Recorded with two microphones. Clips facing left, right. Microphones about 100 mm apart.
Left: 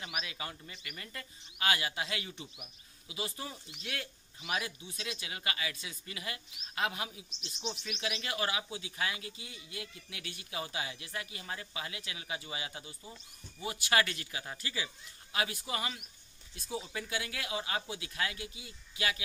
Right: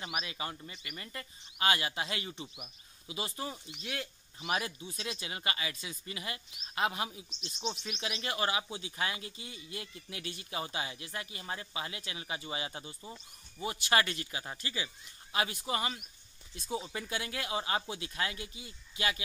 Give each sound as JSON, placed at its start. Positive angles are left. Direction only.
{"t": 0.0, "sound": "a man's voice", "side_deg": -30}
{"t": 15.3, "sound": "speech", "side_deg": -30}